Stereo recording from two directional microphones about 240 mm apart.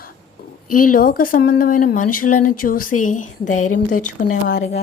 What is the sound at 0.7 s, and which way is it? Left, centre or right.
Speech, left.